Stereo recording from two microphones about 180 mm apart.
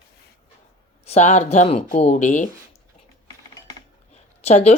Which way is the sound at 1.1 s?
40° left (ahead or behind).